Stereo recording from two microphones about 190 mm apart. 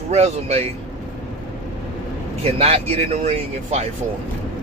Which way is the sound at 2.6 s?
35° right (ahead or behind).